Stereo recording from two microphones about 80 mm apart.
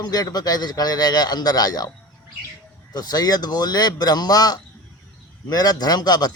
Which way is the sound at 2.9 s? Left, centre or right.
Left.